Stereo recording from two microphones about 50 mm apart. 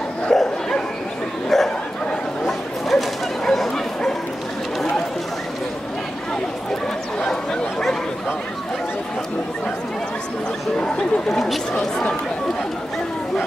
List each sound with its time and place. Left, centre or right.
0.3 s bow-wow: centre
6.7 s dog: centre
11.0 s dog: centre
11.7 s chatter: centre